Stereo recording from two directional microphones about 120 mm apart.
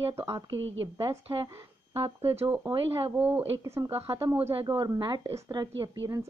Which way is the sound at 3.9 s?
50° right (ahead or behind).